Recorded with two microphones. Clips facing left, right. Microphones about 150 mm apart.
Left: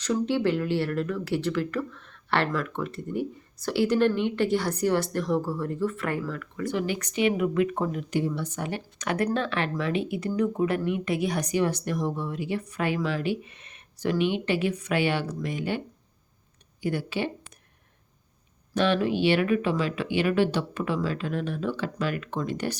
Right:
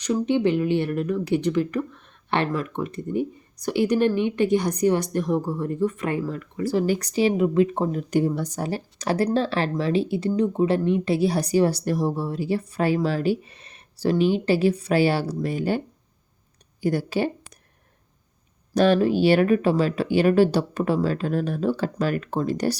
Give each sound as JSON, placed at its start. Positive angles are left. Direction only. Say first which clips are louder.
{"t": 0.0, "sound": "speech", "louder": "right 3 dB", "side_deg": -15}
{"t": 8.1, "sound": "speech", "louder": "right 5 dB", "side_deg": -45}
{"t": 16.8, "sound": "speech", "louder": "right 5 dB", "side_deg": -40}
{"t": 18.7, "sound": "speech", "louder": "right 5 dB", "side_deg": -40}